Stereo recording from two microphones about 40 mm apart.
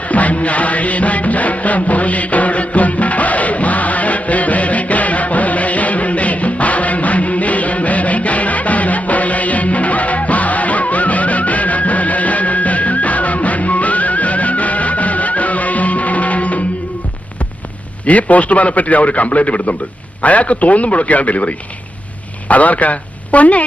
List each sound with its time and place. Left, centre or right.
0.1 s music: left
18.0 s a man's voice: left